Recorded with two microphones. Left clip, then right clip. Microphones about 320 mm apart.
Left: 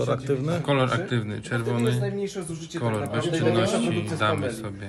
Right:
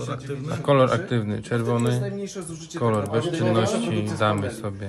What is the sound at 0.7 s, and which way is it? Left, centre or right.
Speech, right.